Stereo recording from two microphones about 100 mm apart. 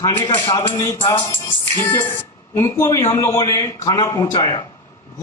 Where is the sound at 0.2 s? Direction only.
55° left (ahead or behind).